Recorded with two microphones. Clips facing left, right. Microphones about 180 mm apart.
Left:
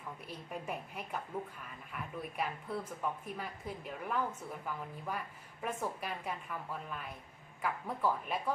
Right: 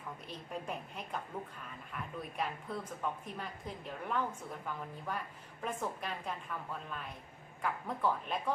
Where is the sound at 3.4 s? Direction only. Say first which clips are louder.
Left 1 dB; 5° left (ahead or behind).